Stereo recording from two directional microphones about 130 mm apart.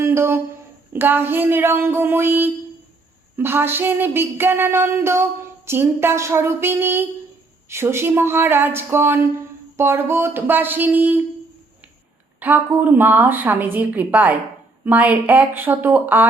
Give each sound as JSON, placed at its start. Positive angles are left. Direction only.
{"t": 0.0, "sound": "speech", "side_deg": -20}
{"t": 12.4, "sound": "speech", "side_deg": -15}